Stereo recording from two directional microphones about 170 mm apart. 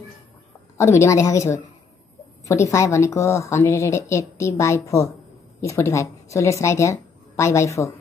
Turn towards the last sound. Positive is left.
turn(degrees=15)  # may be behind; listen again after turning